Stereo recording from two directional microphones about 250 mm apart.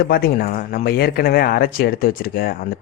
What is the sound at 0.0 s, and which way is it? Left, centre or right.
Speech, left.